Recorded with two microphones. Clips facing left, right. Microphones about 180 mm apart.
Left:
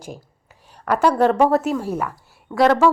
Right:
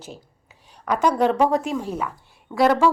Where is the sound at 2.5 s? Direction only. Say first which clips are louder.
Left 2 dB; 10° right (ahead or behind).